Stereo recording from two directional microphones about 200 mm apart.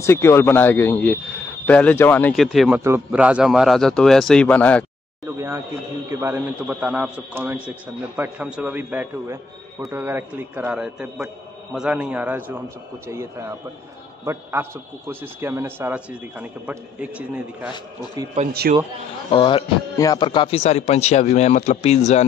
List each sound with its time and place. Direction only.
0.0 s a man's voice: 15° left (ahead or behind)
6.0 s a man's voice: 10° right (ahead or behind)
18.5 s a man's voice: 50° right (ahead or behind)
19.3 s a man's voice: 25° left (ahead or behind)